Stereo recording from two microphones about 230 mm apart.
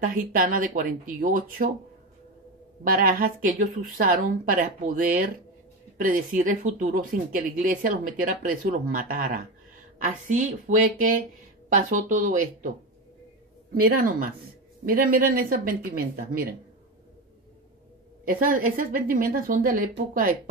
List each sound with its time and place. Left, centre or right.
0.0 s speech: right
2.8 s speech: right
13.8 s speech: right
18.2 s speech: right